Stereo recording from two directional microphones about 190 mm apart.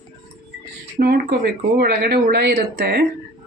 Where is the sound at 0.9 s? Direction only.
55° right (ahead or behind).